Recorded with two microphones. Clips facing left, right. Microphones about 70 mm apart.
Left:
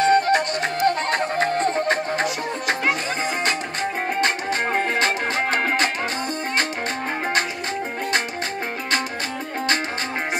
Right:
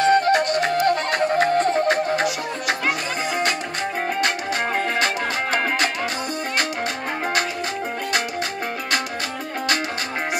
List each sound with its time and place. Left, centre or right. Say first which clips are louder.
0.0 s music: right 1 dB; left
4.2 s music: left 2 dB; left